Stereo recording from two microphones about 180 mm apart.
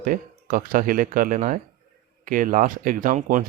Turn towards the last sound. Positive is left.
turn(degrees=-45)  # may be behind; listen again after turning